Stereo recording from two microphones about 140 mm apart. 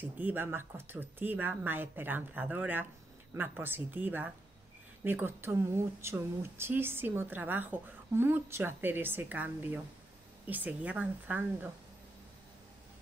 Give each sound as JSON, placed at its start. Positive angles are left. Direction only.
{"t": 0.0, "sound": "speech", "side_deg": -15}